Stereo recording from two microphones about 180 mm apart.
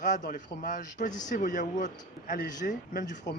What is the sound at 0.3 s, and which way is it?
A man's voice, 50° left (ahead or behind).